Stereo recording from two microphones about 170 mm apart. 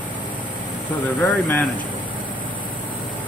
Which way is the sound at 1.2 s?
10° left (ahead or behind).